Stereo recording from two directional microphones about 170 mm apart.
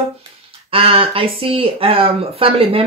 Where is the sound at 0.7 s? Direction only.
35° right (ahead or behind).